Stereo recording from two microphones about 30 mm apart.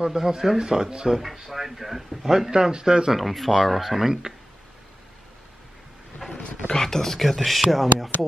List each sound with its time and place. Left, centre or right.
0.0 s speech: centre
1.1 s speech: centre
2.5 s speech: right
3.2 s speech: centre
6.2 s wild animals: centre
6.7 s speech: centre
7.2 s speech: centre